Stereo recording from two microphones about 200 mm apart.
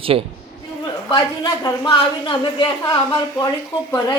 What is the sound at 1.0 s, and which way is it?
Speech, 20° left (ahead or behind).